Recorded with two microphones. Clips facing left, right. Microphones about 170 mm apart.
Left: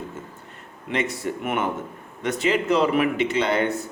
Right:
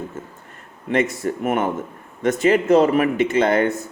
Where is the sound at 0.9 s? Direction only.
50° right (ahead or behind).